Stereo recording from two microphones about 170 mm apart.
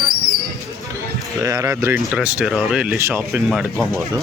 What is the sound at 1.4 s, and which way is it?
Speech, 20° right (ahead or behind).